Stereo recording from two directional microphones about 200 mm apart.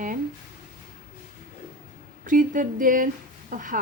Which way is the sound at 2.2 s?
40° right (ahead or behind).